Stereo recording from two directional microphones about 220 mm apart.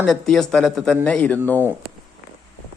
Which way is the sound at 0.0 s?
Centre (ahead or behind).